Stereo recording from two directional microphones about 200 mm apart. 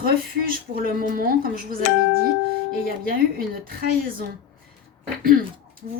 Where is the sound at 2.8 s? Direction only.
45° right (ahead or behind).